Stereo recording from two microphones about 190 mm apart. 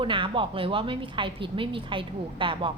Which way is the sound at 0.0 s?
25° right (ahead or behind).